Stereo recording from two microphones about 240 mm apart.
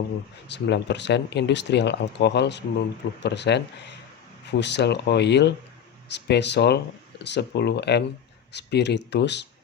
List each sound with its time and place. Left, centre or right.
0.4 s speech: left